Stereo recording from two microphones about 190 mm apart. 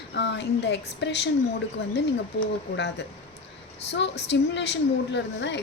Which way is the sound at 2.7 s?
65° left (ahead or behind).